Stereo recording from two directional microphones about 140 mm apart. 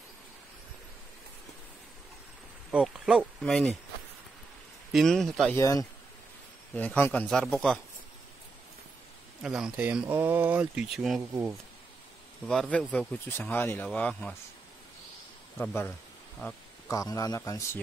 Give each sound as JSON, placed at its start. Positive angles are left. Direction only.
{"t": 2.7, "sound": "speech", "side_deg": -5}
{"t": 4.9, "sound": "speech", "side_deg": 0}
{"t": 5.5, "sound": "a man's voice", "side_deg": 25}
{"t": 6.7, "sound": "speech", "side_deg": 10}
{"t": 9.4, "sound": "speech", "side_deg": -5}
{"t": 12.4, "sound": "speech", "side_deg": 5}
{"t": 15.5, "sound": "a man's voice", "side_deg": 15}